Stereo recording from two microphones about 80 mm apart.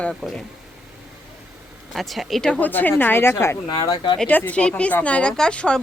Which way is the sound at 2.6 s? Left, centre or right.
Left.